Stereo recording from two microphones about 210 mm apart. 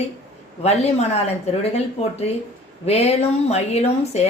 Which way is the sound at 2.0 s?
30° left (ahead or behind).